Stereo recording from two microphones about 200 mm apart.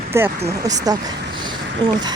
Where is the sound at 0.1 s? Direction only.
15° right (ahead or behind).